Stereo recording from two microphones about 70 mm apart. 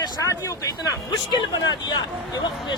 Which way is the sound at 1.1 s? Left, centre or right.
Left.